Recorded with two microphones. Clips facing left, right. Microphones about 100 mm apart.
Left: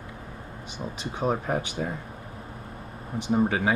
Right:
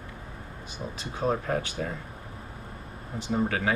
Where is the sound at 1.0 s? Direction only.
20° left (ahead or behind).